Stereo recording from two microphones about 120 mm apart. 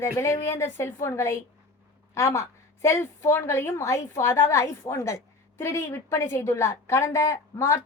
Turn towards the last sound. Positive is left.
turn(degrees=25)  # may be behind; listen again after turning